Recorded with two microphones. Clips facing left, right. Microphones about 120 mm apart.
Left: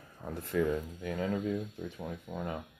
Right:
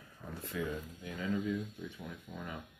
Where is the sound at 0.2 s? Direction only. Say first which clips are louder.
Left 6 dB; 80° left.